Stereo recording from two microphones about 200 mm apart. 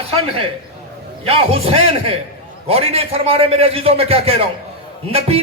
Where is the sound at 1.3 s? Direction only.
30° right (ahead or behind).